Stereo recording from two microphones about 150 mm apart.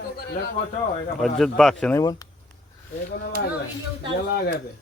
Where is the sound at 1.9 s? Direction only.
25° left (ahead or behind).